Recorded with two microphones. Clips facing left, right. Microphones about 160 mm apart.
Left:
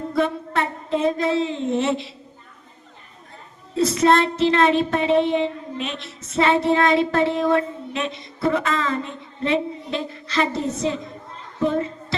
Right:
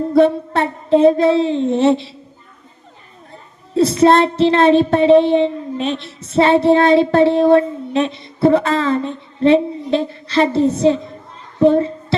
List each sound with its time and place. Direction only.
0.1 s child singing: 30° right (ahead or behind)
3.8 s child singing: 30° right (ahead or behind)